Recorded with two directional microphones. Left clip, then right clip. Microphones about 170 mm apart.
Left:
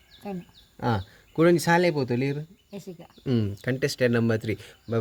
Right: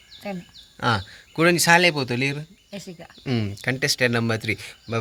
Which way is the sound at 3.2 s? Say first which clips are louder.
Right 2 dB; 30° left (ahead or behind).